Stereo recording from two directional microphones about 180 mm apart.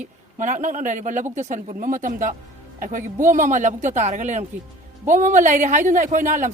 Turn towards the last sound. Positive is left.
turn(degrees=-45)  # may be behind; listen again after turning